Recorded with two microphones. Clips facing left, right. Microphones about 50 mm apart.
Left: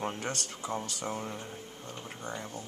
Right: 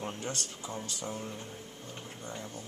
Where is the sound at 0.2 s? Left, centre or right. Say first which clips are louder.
Left 2 dB; left.